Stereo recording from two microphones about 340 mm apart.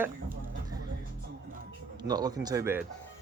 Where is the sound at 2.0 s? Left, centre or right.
Centre.